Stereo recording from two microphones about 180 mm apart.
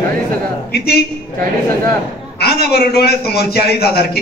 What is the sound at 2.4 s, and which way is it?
A man's voice, 60° left (ahead or behind).